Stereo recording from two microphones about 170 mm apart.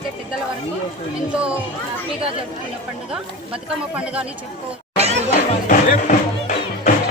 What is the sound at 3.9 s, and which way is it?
Speech, 5° right (ahead or behind).